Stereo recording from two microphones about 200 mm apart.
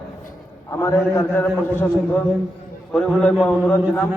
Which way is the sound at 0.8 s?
15° left (ahead or behind).